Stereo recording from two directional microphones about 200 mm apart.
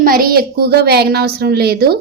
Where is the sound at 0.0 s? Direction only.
45° right (ahead or behind).